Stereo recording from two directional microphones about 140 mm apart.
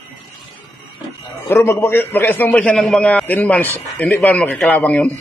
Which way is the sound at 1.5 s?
20° left (ahead or behind).